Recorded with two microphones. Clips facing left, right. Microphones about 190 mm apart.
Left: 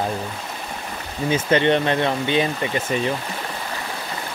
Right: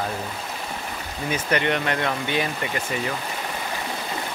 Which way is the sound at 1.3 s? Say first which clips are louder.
Left 6 dB; 25° left (ahead or behind).